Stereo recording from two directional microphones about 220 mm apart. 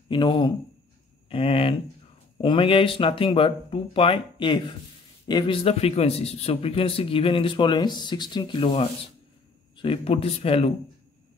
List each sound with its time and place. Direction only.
0.1 s a man's voice: 20° left (ahead or behind)